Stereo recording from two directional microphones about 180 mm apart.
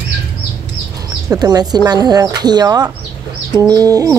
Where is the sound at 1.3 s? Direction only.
20° right (ahead or behind).